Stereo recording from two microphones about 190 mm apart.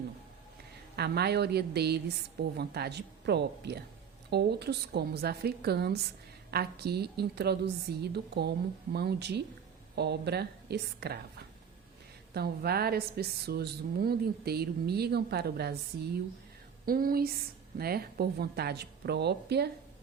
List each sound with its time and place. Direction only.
0.9 s a woman's voice: 60° right (ahead or behind)
12.3 s a woman's voice: 55° right (ahead or behind)
16.8 s a woman's voice: 50° right (ahead or behind)